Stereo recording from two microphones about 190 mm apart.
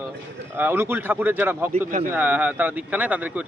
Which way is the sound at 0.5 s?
10° right (ahead or behind).